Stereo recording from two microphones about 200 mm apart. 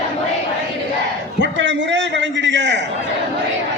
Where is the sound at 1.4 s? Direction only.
65° right (ahead or behind).